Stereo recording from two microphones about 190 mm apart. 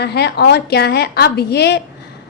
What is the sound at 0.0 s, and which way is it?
A woman's voice, 60° left (ahead or behind).